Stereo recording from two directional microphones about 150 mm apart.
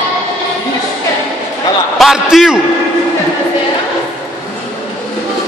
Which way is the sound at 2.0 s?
5° right (ahead or behind).